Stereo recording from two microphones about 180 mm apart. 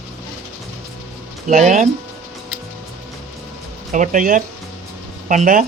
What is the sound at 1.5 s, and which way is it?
Speech, 40° right (ahead or behind).